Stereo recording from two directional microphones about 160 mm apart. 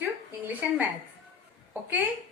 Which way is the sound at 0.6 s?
10° right (ahead or behind).